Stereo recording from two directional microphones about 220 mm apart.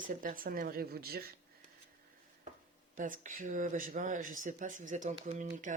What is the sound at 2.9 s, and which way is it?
Speech, 35° right (ahead or behind).